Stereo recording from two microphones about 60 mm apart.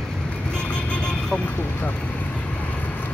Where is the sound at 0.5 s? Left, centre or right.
Centre.